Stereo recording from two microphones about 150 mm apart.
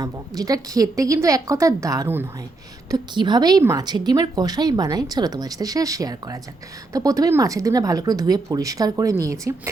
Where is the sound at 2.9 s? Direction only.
30° right (ahead or behind).